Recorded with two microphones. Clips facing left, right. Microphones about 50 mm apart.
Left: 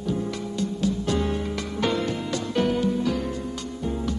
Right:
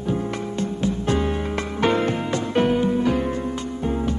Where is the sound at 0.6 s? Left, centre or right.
Right.